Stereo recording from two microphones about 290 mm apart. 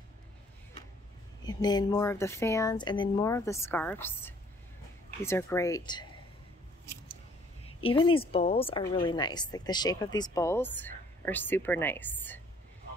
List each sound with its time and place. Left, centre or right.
1.4 s a woman's voice: centre
7.6 s a woman's voice: centre